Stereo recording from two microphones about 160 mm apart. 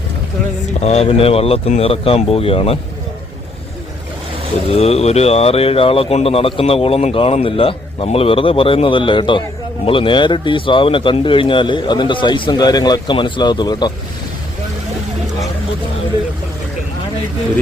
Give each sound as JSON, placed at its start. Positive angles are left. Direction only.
{"t": 0.8, "sound": "speech", "side_deg": 40}
{"t": 4.7, "sound": "speech", "side_deg": 40}